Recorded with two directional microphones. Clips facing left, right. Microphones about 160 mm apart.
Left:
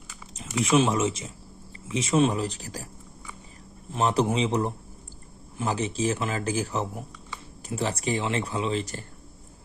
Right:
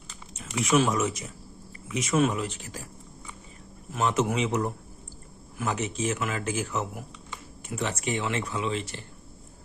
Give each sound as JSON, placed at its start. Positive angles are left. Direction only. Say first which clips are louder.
{"t": 0.6, "sound": "a man's voice", "louder": "left 2 dB", "side_deg": 30}
{"t": 3.9, "sound": "a man's voice", "louder": "left 2 dB", "side_deg": 35}